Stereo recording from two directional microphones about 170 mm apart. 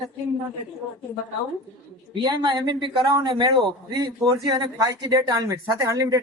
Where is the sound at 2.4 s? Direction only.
30° right (ahead or behind).